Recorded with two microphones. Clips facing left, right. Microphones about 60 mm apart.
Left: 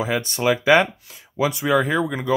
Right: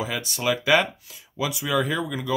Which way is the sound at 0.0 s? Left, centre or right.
Left.